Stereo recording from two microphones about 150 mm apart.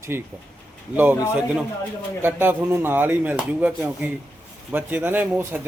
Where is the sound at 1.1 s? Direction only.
20° left (ahead or behind).